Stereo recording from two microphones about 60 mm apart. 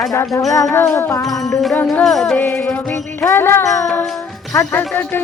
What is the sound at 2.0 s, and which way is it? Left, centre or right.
Speech, centre.